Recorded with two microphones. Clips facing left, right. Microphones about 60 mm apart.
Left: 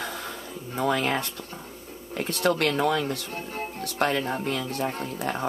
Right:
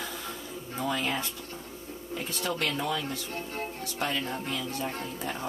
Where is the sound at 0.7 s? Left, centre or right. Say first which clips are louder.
Left 6 dB; left.